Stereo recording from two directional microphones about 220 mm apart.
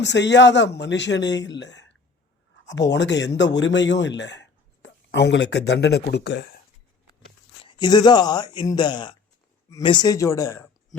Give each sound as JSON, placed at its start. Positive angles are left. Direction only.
{"t": 0.0, "sound": "a man's voice", "side_deg": 55}
{"t": 7.6, "sound": "speech", "side_deg": 20}